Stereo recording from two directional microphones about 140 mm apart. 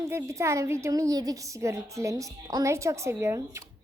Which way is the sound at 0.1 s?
20° right (ahead or behind).